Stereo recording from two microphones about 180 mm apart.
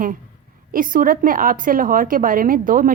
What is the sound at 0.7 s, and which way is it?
A woman's voice, 50° right (ahead or behind).